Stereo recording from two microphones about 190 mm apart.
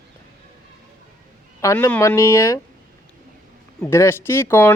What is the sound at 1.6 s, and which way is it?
Speech, 10° left (ahead or behind).